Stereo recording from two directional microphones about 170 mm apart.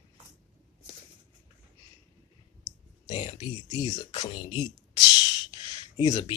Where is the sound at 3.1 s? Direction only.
25° left (ahead or behind).